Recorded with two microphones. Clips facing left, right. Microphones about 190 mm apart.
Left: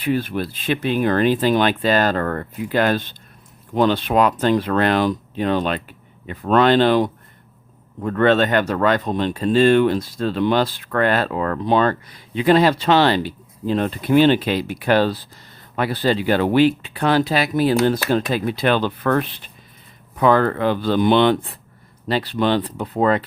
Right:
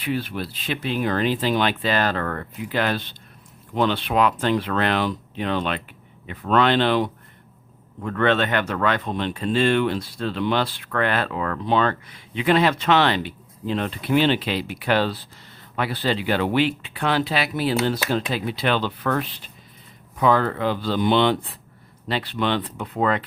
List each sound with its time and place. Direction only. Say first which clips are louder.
0.0 s speech: left 5 dB; 45° left (ahead or behind)
22.0 s speech: left 5 dB; 40° left (ahead or behind)